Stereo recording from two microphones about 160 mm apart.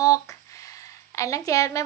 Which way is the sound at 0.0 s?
20° left (ahead or behind).